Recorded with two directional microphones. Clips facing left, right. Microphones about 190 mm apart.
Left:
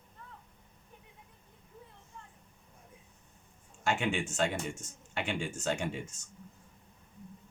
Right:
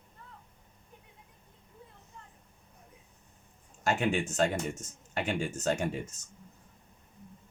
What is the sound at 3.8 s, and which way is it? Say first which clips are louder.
Speech: right 3 dB; 40° right (ahead or behind).